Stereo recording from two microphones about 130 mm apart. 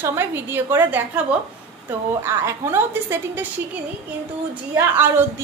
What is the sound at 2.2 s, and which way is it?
A woman's voice, 20° right (ahead or behind).